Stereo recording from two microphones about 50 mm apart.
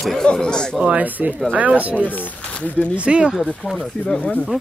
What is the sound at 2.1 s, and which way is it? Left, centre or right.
Speech, left.